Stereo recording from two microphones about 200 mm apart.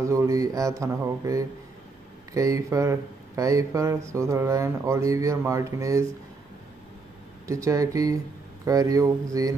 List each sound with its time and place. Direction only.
0.0 s speech: 15° right (ahead or behind)
7.4 s speech: 15° right (ahead or behind)